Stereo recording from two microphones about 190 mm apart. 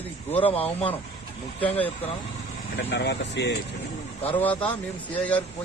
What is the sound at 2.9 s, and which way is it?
Speech, 65° left (ahead or behind).